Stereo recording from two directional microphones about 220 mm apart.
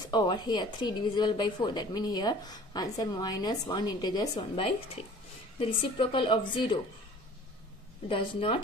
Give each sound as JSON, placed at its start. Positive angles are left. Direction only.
{"t": 0.0, "sound": "a woman's voice", "side_deg": 20}
{"t": 8.1, "sound": "a woman's voice", "side_deg": 25}